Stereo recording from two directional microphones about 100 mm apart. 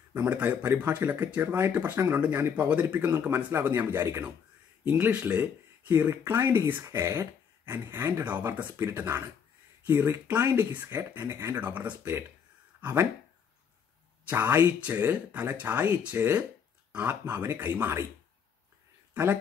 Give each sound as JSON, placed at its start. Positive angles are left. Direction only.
{"t": 0.1, "sound": "speech", "side_deg": -15}
{"t": 14.2, "sound": "speech", "side_deg": -20}